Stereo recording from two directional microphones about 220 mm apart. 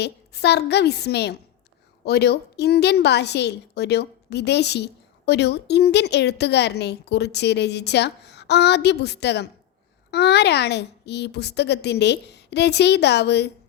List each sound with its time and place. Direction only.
0.0 s a woman's voice: 50° left (ahead or behind)